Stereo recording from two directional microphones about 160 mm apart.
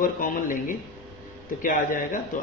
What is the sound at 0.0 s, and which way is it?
Speech, 60° left (ahead or behind).